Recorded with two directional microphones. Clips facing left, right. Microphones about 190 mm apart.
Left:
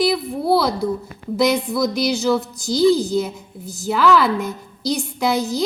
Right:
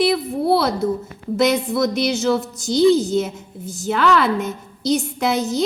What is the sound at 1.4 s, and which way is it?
A woman's voice, centre (ahead or behind).